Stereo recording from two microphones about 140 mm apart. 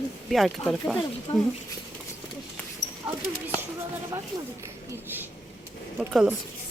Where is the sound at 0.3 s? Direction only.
Centre (ahead or behind).